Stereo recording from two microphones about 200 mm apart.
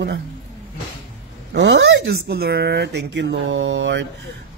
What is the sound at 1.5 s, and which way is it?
Speech, 60° right (ahead or behind).